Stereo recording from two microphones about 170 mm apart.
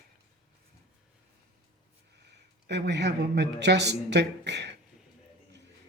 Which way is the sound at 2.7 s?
90° right.